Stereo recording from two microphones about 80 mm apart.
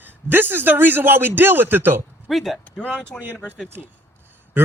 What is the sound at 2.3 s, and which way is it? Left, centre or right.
Speech, centre.